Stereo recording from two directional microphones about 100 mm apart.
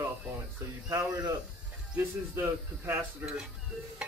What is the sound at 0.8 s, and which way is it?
Speech, 35° right (ahead or behind).